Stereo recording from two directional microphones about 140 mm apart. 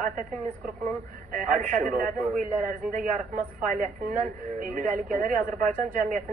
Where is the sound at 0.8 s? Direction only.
65° right (ahead or behind).